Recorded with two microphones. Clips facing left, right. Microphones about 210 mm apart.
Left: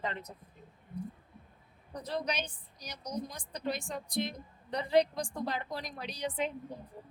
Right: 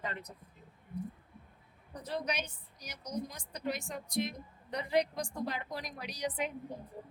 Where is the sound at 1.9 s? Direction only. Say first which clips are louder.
Left 1 dB; 35° left (ahead or behind).